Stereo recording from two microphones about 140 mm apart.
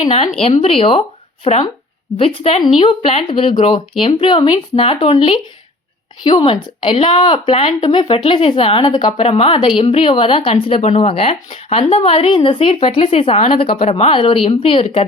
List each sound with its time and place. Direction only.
0.4 s speech: 45° left (ahead or behind)